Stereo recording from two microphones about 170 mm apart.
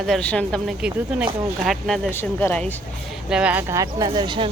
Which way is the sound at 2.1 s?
15° left (ahead or behind).